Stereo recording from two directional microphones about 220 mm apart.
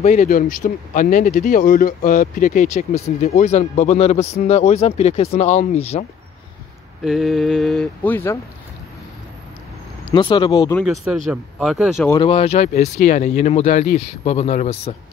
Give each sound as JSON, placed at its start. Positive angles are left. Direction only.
{"t": 0.0, "sound": "speech", "side_deg": 35}
{"t": 7.1, "sound": "speech", "side_deg": 0}
{"t": 10.1, "sound": "speech", "side_deg": 20}
{"t": 10.8, "sound": "speech", "side_deg": 0}
{"t": 12.1, "sound": "speech", "side_deg": 20}